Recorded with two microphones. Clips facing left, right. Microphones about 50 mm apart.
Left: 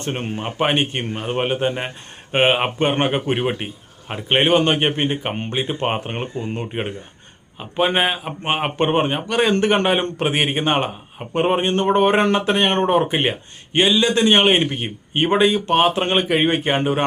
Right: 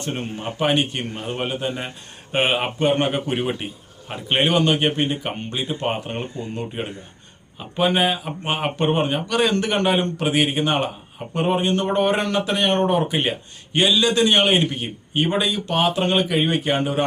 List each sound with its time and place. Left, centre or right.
0.0 s speech: left
2.7 s speech: left
4.5 s speech: left